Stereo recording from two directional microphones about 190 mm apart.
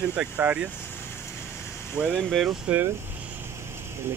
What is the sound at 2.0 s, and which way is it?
Speech, centre (ahead or behind).